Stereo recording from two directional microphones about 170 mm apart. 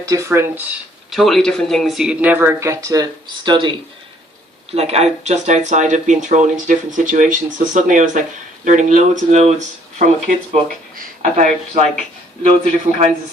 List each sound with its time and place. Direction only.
0.0 s speech: 20° right (ahead or behind)
1.1 s speech: centre (ahead or behind); by 13.1 s 45° right (ahead or behind)